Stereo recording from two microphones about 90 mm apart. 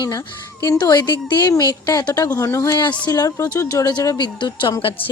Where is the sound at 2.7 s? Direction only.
60° left (ahead or behind).